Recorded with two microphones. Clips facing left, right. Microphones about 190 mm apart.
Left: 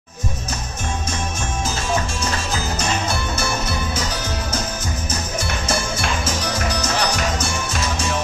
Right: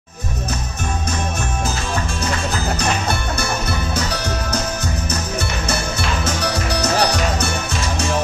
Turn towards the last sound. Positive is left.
turn(degrees=-65)  # may be behind; listen again after turning